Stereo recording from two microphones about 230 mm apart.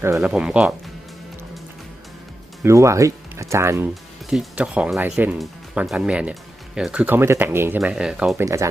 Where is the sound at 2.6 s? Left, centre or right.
Centre.